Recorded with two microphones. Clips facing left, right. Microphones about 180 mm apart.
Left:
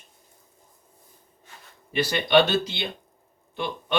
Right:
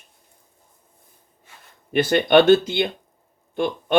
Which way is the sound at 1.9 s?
55° right (ahead or behind).